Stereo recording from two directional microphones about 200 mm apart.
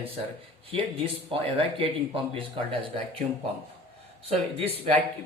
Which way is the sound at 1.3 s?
25° right (ahead or behind).